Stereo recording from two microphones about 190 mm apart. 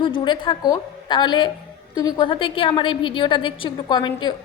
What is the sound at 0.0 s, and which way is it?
A woman's voice, 25° left (ahead or behind).